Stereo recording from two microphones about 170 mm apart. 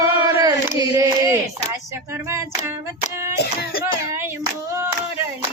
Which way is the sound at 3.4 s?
60° left (ahead or behind).